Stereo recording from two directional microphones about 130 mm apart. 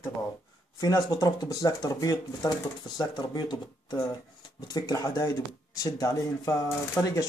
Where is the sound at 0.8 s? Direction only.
30° left (ahead or behind).